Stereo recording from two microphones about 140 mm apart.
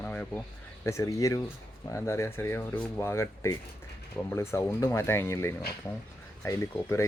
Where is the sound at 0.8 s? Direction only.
20° left (ahead or behind).